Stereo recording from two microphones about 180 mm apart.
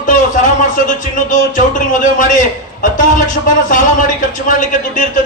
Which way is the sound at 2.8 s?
45° left (ahead or behind).